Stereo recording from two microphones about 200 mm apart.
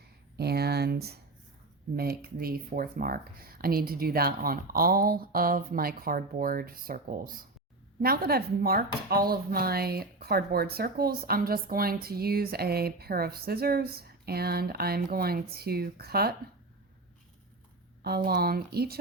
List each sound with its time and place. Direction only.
0.3 s speech: 55° right (ahead or behind)
18.0 s speech: 50° right (ahead or behind)